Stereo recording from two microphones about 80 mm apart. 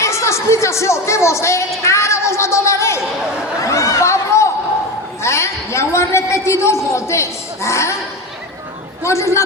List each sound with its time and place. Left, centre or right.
0.0 s speech: left
3.6 s a sound: left
5.2 s a man's voice: left
9.0 s speech: left